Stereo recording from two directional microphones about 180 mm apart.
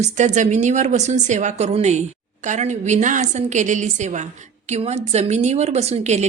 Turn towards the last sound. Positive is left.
turn(degrees=-40)  # may be behind; listen again after turning